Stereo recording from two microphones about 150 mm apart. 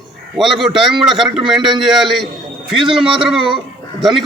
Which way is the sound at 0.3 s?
Centre (ahead or behind).